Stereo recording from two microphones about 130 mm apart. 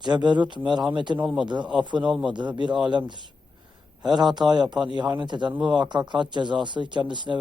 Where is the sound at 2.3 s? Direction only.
35° right (ahead or behind).